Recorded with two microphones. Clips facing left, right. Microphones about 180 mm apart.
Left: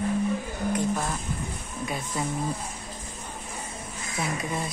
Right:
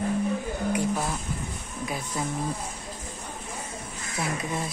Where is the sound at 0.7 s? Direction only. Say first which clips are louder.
Left 1 dB; 10° right (ahead or behind).